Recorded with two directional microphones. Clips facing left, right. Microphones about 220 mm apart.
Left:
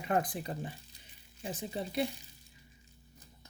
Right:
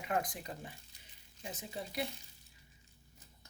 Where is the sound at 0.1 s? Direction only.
30° left (ahead or behind).